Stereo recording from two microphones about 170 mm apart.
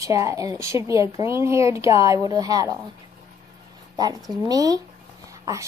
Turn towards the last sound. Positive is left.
turn(degrees=-20)  # may be behind; listen again after turning